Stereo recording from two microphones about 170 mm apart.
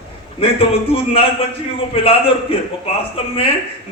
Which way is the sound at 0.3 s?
35° left (ahead or behind).